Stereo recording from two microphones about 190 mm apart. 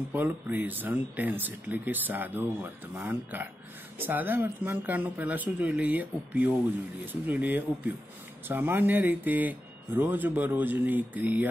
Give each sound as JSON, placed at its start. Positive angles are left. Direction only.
{"t": 0.1, "sound": "speech", "side_deg": -10}